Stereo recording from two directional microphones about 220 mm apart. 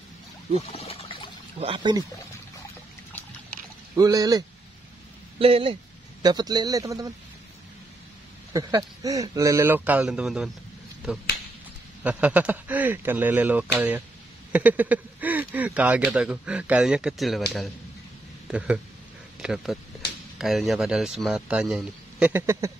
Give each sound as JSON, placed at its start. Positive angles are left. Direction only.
{"t": 0.6, "sound": "a sound", "side_deg": 25}
{"t": 1.6, "sound": "speech", "side_deg": -20}
{"t": 3.9, "sound": "speech", "side_deg": -15}
{"t": 8.5, "sound": "speech", "side_deg": -15}
{"t": 12.0, "sound": "speech", "side_deg": -5}
{"t": 19.3, "sound": "a man's voice", "side_deg": 0}